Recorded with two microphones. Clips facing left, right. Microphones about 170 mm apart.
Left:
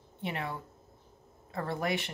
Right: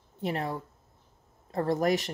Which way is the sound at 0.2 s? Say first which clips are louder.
Right 5 dB; 40° right (ahead or behind).